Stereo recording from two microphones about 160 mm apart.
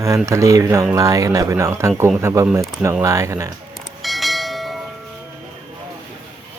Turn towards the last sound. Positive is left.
turn(degrees=0)  # may be behind; listen again after turning